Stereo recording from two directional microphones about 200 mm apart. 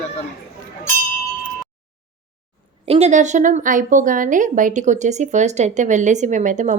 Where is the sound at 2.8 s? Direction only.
30° right (ahead or behind).